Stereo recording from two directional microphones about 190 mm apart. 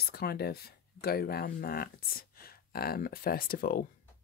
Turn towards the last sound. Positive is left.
turn(degrees=50)  # may be behind; listen again after turning